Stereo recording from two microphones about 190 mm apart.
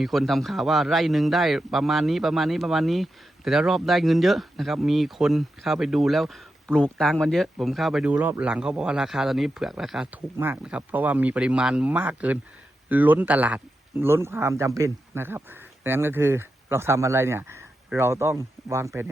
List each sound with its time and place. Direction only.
0.0 s a man's voice: centre (ahead or behind)